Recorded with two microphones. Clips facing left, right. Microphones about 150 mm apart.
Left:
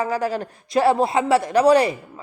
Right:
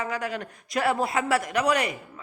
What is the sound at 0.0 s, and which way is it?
A man's voice, 35° left (ahead or behind).